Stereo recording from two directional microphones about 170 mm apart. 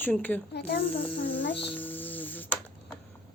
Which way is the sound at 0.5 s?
65° left (ahead or behind).